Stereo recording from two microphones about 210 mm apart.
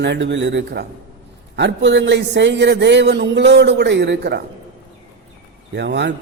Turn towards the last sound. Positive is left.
turn(degrees=-55)  # may be behind; listen again after turning